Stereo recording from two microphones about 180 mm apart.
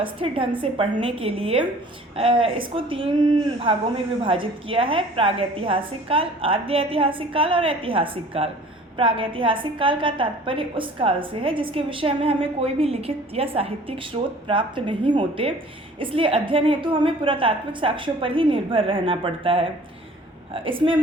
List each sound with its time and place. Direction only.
0.0 s a woman's voice: 30° right (ahead or behind)